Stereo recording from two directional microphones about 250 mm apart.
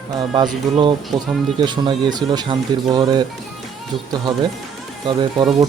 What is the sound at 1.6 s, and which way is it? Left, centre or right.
Speech, centre.